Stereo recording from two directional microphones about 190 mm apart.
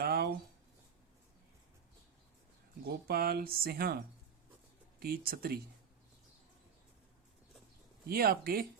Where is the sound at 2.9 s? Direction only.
55° right (ahead or behind).